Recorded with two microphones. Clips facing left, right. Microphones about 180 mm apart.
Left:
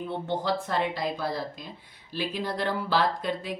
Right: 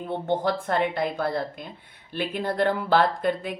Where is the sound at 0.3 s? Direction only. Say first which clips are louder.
Right 5 dB; 55° right (ahead or behind).